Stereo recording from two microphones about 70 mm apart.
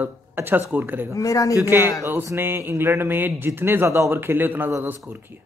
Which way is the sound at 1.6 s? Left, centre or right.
Right.